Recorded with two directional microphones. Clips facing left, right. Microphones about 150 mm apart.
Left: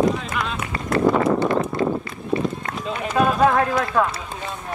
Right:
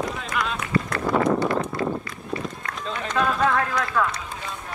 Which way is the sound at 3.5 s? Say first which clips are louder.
Left 4 dB; 25° left (ahead or behind).